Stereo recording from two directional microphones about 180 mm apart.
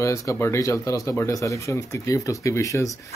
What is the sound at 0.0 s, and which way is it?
Speech, 15° left (ahead or behind).